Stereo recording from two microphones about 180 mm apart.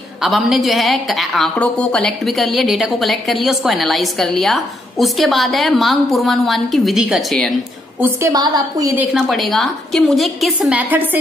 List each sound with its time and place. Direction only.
0.2 s a woman's voice: centre (ahead or behind)
8.0 s a woman's voice: 15° right (ahead or behind)
9.0 s a woman's voice: centre (ahead or behind)